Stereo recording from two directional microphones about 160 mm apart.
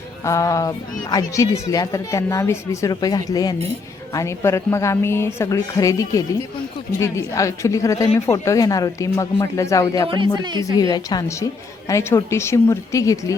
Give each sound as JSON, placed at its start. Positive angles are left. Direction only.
{"t": 0.3, "sound": "speech", "side_deg": 20}
{"t": 10.1, "sound": "speech", "side_deg": -30}
{"t": 10.8, "sound": "a woman's voice", "side_deg": 25}